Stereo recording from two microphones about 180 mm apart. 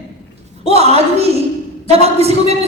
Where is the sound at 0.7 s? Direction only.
35° right (ahead or behind).